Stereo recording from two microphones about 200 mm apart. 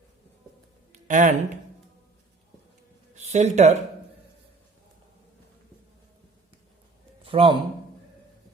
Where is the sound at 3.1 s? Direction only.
35° right (ahead or behind).